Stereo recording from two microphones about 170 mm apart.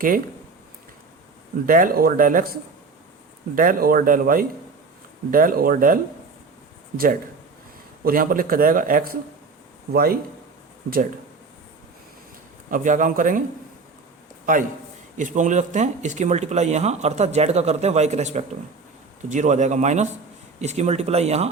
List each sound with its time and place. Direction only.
1.6 s speech: 55° right (ahead or behind)
12.7 s speech: 50° right (ahead or behind)
15.2 s speech: 45° right (ahead or behind)